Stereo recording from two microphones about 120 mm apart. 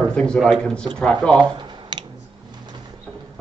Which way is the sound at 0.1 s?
10° left (ahead or behind).